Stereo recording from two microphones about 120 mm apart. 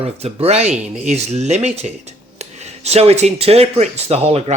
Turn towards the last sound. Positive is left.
turn(degrees=-55)  # may be behind; listen again after turning